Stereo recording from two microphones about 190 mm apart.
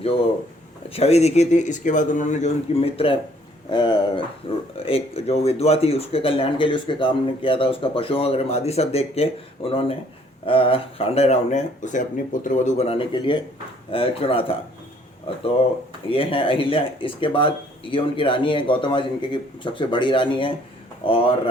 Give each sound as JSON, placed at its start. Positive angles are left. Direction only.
{"t": 0.9, "sound": "speech", "side_deg": 35}
{"t": 16.0, "sound": "speech", "side_deg": 30}